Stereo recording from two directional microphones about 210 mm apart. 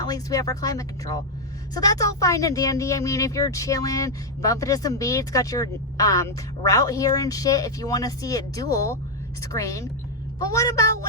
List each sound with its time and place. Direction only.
0.0 s speech: 15° left (ahead or behind)